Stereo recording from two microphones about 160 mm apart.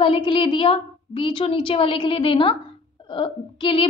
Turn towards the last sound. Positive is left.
turn(degrees=30)  # may be behind; listen again after turning